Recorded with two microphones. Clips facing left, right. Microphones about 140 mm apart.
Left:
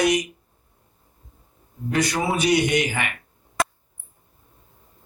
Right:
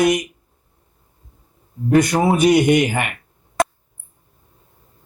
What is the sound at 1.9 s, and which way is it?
A man's voice, 45° right (ahead or behind).